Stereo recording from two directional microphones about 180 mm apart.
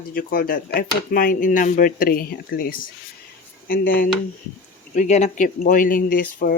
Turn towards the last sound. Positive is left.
turn(degrees=55)  # may be behind; listen again after turning